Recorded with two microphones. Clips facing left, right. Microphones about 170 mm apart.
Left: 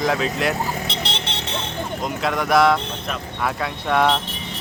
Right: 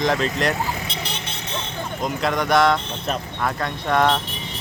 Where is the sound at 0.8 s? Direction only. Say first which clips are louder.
Left 3 dB; 75° left (ahead or behind).